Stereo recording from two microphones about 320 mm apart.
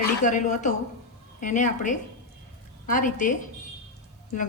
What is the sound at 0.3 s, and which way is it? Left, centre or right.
A woman's voice, left.